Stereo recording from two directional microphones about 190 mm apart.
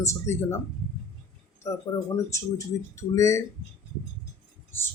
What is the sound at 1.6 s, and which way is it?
Speech, 15° left (ahead or behind).